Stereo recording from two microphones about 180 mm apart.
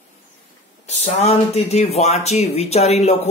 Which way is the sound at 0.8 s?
40° left (ahead or behind).